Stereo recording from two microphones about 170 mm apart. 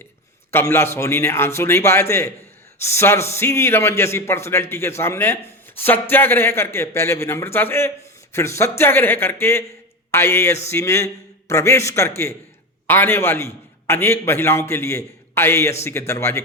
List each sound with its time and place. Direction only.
0.5 s a man's voice: 15° left (ahead or behind)